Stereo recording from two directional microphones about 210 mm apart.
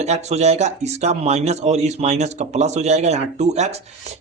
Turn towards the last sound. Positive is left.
turn(degrees=-30)  # may be behind; listen again after turning